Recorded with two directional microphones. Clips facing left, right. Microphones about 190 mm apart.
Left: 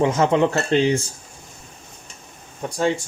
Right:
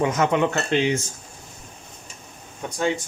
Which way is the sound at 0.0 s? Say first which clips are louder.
Left 3 dB; 30° left (ahead or behind).